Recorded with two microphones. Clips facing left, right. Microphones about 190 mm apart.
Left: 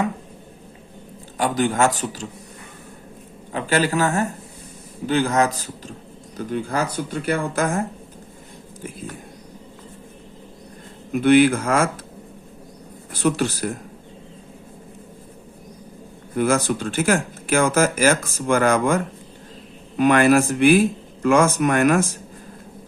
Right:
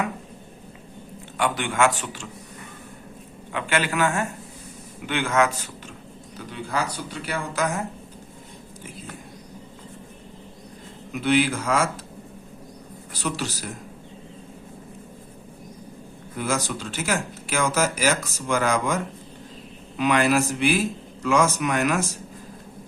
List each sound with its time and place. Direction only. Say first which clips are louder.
1.4 s a man's voice: left 3 dB; 40° left (ahead or behind)
3.5 s a man's voice: left 5 dB; 40° left (ahead or behind)
6.3 s speech: left 5 dB; 50° left (ahead or behind)
11.1 s speech: left 7 dB; 55° left (ahead or behind)
13.1 s speech: left 8 dB; 55° left (ahead or behind)
16.4 s speech: left 7 dB; 55° left (ahead or behind)